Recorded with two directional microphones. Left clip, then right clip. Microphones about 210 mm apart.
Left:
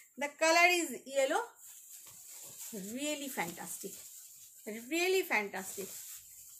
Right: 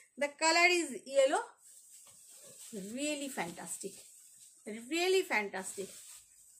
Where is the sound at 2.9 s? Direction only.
15° right (ahead or behind).